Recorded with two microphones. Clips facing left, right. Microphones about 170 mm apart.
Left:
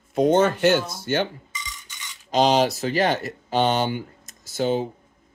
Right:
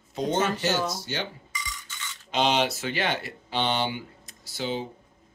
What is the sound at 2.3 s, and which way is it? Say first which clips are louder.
Speech: left 6 dB; 40° left (ahead or behind).